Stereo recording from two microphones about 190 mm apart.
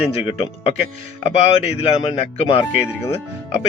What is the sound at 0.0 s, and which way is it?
Speech, 30° left (ahead or behind).